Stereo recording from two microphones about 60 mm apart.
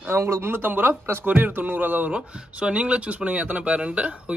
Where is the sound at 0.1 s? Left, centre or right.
Right.